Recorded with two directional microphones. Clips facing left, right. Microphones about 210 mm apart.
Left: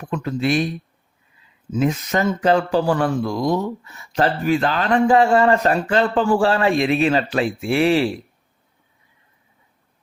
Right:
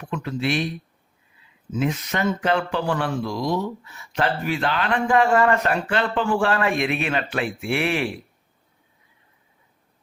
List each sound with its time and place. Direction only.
0.0 s speech: 40° left (ahead or behind)
1.7 s speech: 40° left (ahead or behind)